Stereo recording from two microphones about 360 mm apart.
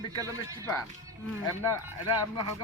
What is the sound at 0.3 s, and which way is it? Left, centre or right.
Speech, centre.